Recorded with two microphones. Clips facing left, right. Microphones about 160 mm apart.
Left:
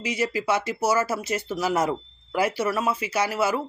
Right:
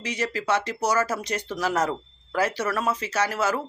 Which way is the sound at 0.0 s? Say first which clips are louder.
Left 3 dB; 10° left (ahead or behind).